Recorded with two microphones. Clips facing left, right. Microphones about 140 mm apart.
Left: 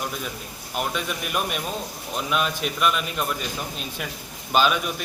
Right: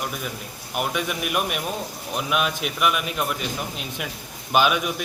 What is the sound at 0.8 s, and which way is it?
A man's voice, 15° right (ahead or behind).